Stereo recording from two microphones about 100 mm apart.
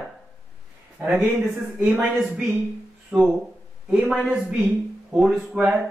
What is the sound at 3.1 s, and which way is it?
Speech, 5° right (ahead or behind).